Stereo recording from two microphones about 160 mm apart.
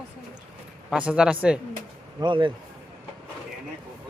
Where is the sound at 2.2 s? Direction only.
30° right (ahead or behind).